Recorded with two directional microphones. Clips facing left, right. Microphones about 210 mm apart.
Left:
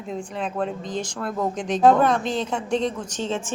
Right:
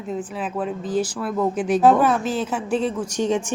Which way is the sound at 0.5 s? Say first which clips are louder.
Right 6 dB; 5° right (ahead or behind).